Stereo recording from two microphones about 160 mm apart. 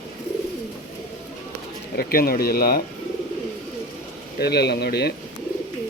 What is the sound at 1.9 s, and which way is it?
Speech, 70° left (ahead or behind).